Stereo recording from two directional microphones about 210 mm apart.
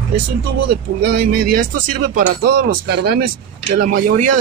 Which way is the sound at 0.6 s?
50° right (ahead or behind).